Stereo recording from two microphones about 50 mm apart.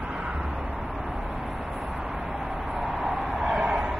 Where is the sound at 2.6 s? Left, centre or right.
Centre.